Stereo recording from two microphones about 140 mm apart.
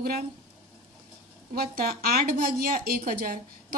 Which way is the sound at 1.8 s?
90° right.